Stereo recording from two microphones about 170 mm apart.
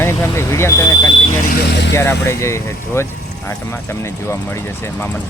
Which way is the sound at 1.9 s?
15° left (ahead or behind).